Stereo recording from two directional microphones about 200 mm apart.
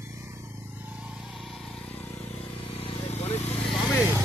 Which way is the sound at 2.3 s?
30° left (ahead or behind).